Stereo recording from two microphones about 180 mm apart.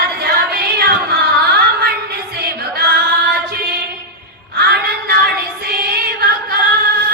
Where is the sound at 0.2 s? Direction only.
60° right (ahead or behind).